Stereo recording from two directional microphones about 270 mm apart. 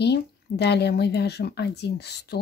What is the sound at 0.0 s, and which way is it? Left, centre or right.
Speech, left.